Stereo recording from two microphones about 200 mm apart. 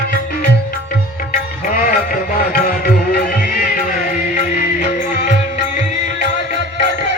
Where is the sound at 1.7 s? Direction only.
45° left (ahead or behind).